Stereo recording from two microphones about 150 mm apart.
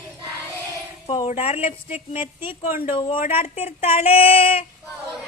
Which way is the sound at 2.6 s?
65° left (ahead or behind).